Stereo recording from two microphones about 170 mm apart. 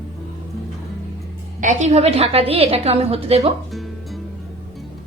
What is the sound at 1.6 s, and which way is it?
A woman's voice, 45° right (ahead or behind).